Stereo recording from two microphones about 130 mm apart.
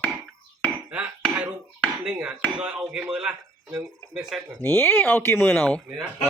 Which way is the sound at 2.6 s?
5° right (ahead or behind).